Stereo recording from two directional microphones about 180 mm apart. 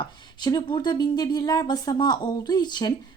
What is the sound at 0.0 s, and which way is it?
A woman's voice, 25° left (ahead or behind).